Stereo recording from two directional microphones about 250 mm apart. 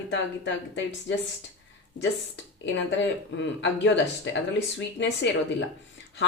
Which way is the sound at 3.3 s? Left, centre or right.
Left.